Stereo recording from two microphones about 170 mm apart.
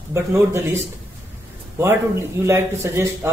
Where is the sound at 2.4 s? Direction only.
15° right (ahead or behind).